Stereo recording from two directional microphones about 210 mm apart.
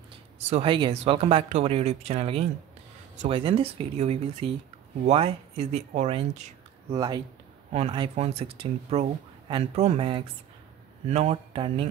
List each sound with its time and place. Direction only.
0.5 s speech: 25° right (ahead or behind)
6.9 s speech: 20° right (ahead or behind)